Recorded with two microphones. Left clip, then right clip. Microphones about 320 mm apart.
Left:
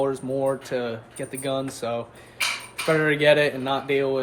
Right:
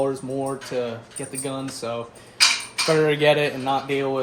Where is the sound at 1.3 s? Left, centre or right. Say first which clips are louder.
Left 3 dB; left.